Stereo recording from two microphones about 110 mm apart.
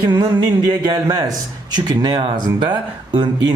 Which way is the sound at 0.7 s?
40° right (ahead or behind).